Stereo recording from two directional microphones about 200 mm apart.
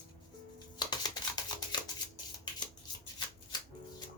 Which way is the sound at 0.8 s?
20° left (ahead or behind).